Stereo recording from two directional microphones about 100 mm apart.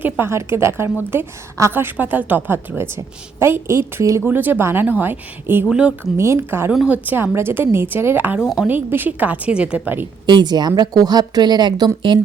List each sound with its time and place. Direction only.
0.0 s a woman's voice: 25° right (ahead or behind)
5.6 s a woman's voice: 10° right (ahead or behind)
6.1 s a woman's voice: 25° right (ahead or behind)
10.3 s a woman's voice: 45° right (ahead or behind)